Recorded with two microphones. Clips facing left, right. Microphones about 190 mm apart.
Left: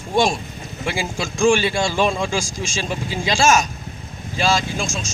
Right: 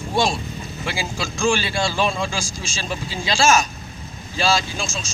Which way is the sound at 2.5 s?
45° left (ahead or behind).